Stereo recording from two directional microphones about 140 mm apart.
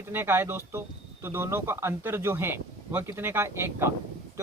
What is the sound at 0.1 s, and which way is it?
Speech, 15° right (ahead or behind).